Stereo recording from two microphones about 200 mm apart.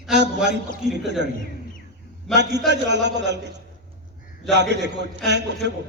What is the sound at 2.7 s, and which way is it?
A man's voice, 60° right (ahead or behind).